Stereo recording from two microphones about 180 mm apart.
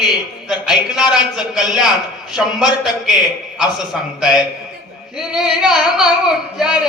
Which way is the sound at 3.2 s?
20° left (ahead or behind).